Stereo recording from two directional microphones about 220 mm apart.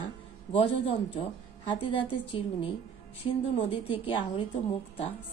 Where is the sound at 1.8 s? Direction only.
25° left (ahead or behind).